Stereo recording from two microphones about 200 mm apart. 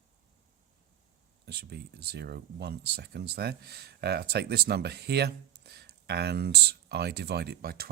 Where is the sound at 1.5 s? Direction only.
55° right (ahead or behind).